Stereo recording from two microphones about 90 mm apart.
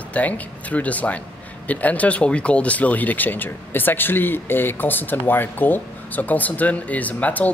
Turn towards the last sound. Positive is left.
turn(degrees=15)  # may be behind; listen again after turning